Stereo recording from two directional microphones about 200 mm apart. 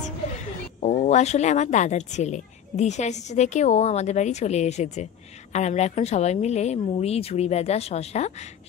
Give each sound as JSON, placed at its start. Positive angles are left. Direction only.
{"t": 0.4, "sound": "a woman's voice", "side_deg": 35}